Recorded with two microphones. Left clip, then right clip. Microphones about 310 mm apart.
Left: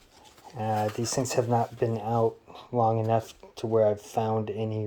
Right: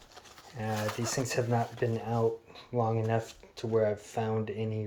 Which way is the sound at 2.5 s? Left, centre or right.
Centre.